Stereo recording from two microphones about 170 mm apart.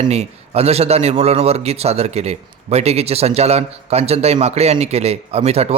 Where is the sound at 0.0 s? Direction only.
40° right (ahead or behind).